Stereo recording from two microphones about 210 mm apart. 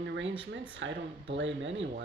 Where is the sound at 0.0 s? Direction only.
55° right (ahead or behind).